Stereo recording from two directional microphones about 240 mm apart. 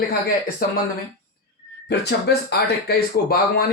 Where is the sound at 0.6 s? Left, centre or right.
Left.